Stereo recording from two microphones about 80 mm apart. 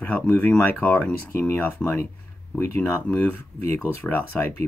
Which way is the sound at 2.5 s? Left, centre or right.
Left.